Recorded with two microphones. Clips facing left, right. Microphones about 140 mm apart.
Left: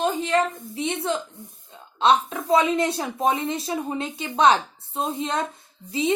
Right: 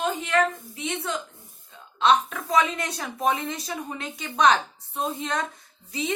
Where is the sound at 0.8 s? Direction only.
30° left (ahead or behind).